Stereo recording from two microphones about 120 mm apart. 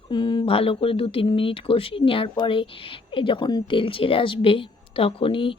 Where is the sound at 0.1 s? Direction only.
40° left (ahead or behind).